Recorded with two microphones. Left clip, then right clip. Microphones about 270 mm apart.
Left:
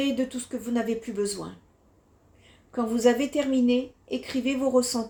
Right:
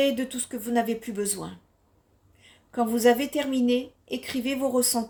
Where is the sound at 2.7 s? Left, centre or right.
Right.